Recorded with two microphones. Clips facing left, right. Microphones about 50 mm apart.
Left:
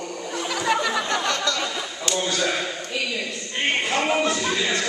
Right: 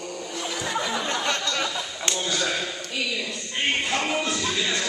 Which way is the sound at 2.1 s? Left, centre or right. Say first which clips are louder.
Left 3 dB; right.